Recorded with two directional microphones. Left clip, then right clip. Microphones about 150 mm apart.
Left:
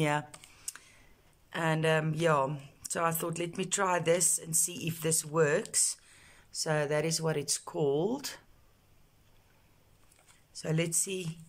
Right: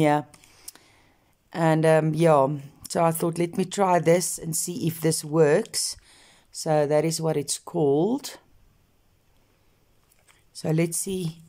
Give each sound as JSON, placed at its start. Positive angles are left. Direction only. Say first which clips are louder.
{"t": 0.0, "sound": "speech", "louder": "right 9 dB", "side_deg": -30}
{"t": 0.7, "sound": "clicking", "louder": "left 3 dB", "side_deg": -35}
{"t": 1.5, "sound": "speech", "louder": "right 9 dB", "side_deg": -35}
{"t": 10.5, "sound": "speech", "louder": "right 7 dB", "side_deg": -30}